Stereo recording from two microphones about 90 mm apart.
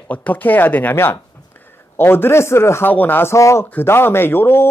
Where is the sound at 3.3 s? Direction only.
35° left (ahead or behind).